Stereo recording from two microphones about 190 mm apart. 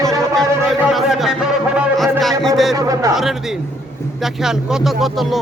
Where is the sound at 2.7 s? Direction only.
20° right (ahead or behind).